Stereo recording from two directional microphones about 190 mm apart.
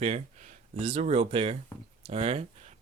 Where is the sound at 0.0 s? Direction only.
35° right (ahead or behind).